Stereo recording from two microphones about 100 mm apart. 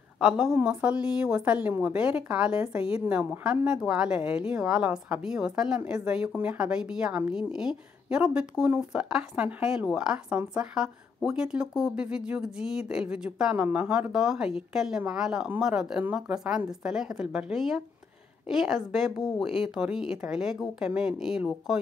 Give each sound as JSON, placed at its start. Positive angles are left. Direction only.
{"t": 0.2, "sound": "a woman's voice", "side_deg": -5}